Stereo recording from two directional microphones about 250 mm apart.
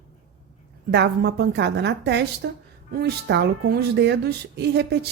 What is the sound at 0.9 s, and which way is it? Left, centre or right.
A woman's voice, right.